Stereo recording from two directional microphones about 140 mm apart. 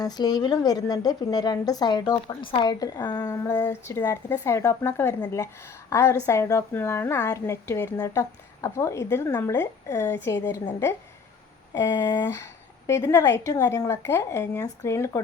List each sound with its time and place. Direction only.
0.0 s a woman's voice: 30° left (ahead or behind)
12.2 s a woman's voice: 20° left (ahead or behind)